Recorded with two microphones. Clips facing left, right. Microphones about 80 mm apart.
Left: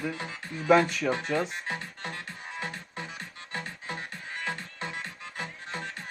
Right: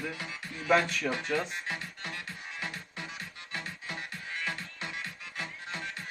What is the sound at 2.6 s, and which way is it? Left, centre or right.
Music, left.